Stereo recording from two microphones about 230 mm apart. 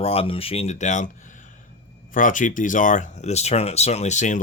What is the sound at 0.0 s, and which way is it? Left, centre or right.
Speech, left.